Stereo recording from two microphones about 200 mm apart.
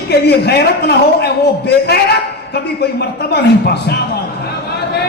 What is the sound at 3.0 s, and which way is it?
A man's voice, 55° left (ahead or behind).